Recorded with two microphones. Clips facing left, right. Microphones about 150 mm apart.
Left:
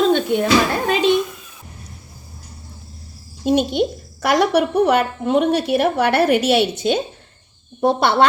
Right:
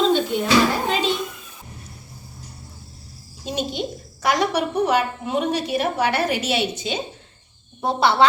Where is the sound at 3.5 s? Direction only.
55° left (ahead or behind).